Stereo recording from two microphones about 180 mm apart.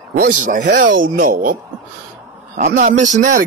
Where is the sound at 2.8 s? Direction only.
45° right (ahead or behind).